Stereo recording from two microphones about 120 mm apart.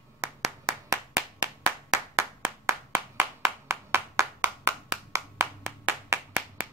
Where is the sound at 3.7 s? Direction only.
25° right (ahead or behind).